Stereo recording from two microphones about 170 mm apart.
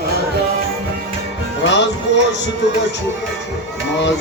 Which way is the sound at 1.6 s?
90° left.